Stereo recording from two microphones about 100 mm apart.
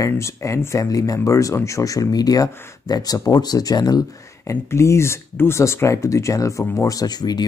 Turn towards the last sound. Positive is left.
turn(degrees=45)  # may be behind; listen again after turning